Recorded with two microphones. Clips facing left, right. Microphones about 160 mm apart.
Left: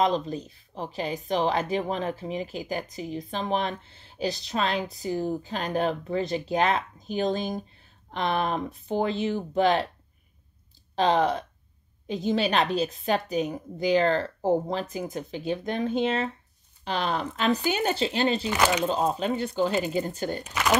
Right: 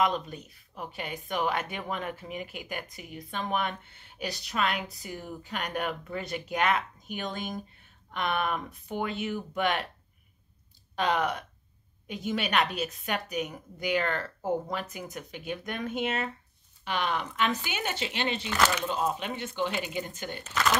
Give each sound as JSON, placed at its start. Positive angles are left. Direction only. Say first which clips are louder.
{"t": 0.0, "sound": "speech", "louder": "left 3 dB", "side_deg": 30}
{"t": 11.0, "sound": "speech", "louder": "left 5 dB", "side_deg": 30}
{"t": 18.5, "sound": "speech", "louder": "left 4 dB", "side_deg": 15}
{"t": 18.9, "sound": "speech", "louder": "left 5 dB", "side_deg": 35}
{"t": 20.4, "sound": "speech", "louder": "right 2 dB", "side_deg": 10}